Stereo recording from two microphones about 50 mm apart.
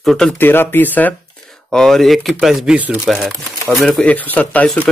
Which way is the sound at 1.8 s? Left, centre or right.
Centre.